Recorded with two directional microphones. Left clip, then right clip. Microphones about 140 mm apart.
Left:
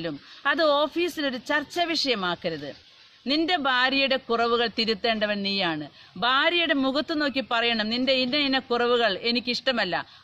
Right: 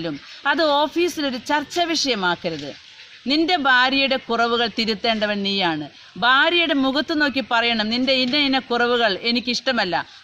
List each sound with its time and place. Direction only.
0.0 s speech: 15° left (ahead or behind)